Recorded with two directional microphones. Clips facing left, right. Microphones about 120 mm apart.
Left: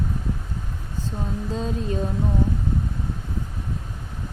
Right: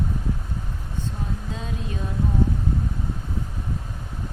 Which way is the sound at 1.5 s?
35° left (ahead or behind).